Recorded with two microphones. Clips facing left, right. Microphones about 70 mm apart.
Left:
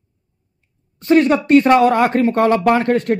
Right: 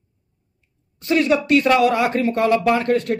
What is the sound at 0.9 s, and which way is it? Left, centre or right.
Speech, left.